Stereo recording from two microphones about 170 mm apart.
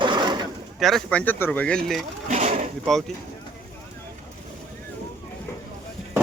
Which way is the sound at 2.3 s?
45° right (ahead or behind).